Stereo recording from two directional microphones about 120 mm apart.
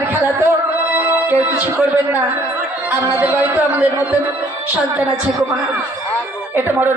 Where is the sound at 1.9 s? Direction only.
15° right (ahead or behind).